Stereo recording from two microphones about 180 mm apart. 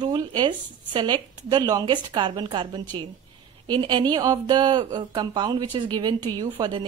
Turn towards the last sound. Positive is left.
turn(degrees=-20)  # may be behind; listen again after turning